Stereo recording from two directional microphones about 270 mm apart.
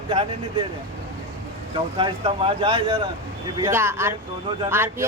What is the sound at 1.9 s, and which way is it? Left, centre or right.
Speech, centre.